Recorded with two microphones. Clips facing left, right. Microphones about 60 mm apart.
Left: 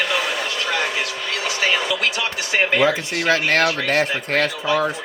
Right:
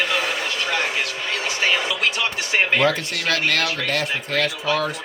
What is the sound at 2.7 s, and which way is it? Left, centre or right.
Speech, centre.